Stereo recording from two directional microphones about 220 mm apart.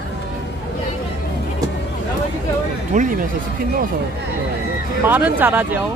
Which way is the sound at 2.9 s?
35° right (ahead or behind).